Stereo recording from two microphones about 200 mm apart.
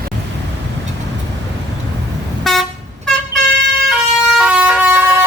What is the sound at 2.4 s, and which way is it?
Vehicle, centre (ahead or behind).